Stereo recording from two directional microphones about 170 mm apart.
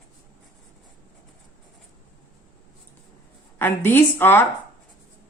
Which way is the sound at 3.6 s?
15° left (ahead or behind).